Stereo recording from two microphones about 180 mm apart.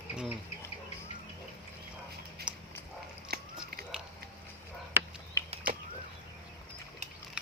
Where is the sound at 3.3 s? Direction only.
60° right (ahead or behind).